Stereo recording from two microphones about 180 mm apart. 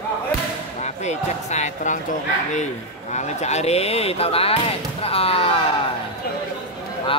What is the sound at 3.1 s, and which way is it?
Speech, 40° left (ahead or behind).